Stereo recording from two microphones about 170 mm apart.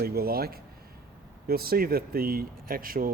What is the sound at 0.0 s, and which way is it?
Speech, 65° right (ahead or behind).